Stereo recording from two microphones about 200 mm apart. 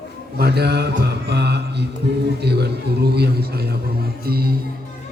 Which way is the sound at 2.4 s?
55° right (ahead or behind).